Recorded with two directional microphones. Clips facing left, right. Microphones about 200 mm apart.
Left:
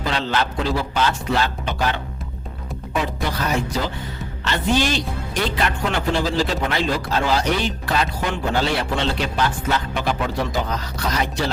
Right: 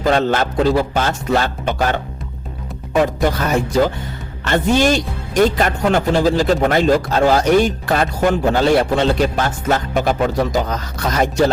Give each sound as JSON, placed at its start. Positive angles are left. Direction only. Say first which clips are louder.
{"t": 0.0, "sound": "a man's voice", "louder": "right 7 dB", "side_deg": -50}